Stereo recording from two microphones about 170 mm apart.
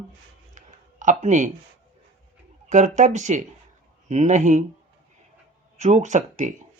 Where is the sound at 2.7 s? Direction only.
45° right (ahead or behind).